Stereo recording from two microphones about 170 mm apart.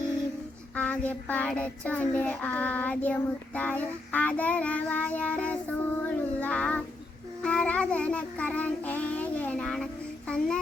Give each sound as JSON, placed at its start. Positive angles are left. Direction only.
{"t": 0.8, "sound": "child singing", "side_deg": 10}